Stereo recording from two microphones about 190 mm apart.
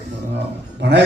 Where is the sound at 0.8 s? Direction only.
65° right (ahead or behind).